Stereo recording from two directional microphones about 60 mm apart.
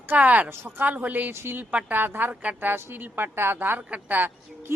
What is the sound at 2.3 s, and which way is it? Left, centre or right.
Speech, right.